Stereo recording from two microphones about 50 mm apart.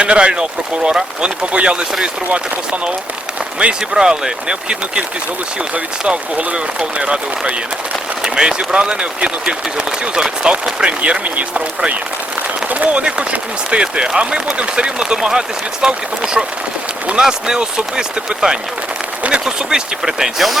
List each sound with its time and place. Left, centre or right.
0.0 s speech: right
3.6 s speech: centre
5.7 s speech: right; by 20.6 s centre